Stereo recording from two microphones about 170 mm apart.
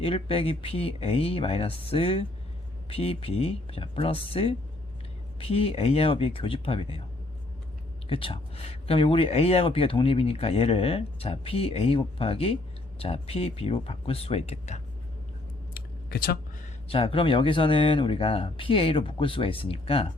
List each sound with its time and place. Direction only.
0.0 s speech: 35° left (ahead or behind)
8.1 s speech: 35° left (ahead or behind)
15.7 s a sound: 60° left (ahead or behind)
16.9 s speech: 35° left (ahead or behind)